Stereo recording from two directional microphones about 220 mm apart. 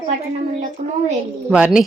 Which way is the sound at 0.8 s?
30° right (ahead or behind).